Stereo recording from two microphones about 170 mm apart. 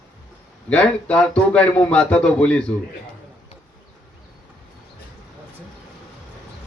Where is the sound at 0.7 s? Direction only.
5° left (ahead or behind).